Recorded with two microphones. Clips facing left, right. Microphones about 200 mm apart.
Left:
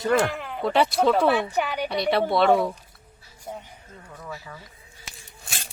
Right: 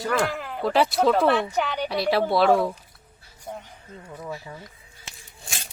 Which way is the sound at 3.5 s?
5° left (ahead or behind).